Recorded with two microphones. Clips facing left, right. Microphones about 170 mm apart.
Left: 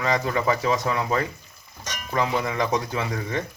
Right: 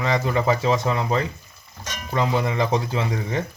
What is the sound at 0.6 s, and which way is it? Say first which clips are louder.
Speech: right 2 dB; 25° right (ahead or behind).